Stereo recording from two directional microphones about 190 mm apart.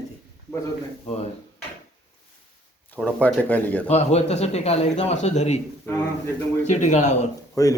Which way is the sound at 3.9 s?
35° left (ahead or behind).